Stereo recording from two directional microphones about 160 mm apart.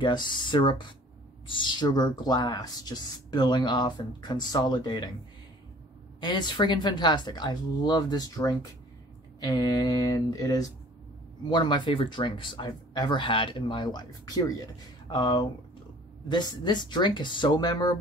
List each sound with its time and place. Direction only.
0.0 s speech: 30° left (ahead or behind)
6.2 s speech: 25° left (ahead or behind)